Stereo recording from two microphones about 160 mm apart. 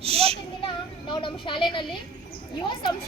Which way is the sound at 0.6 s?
30° left (ahead or behind).